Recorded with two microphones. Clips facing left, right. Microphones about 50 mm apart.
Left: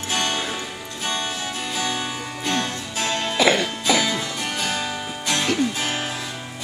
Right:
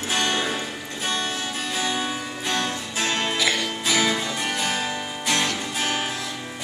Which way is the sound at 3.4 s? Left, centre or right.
Left.